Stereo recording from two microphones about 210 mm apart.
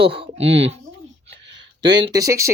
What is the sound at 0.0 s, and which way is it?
Speech, 25° right (ahead or behind).